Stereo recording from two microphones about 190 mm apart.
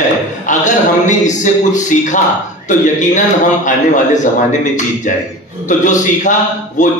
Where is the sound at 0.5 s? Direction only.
40° left (ahead or behind).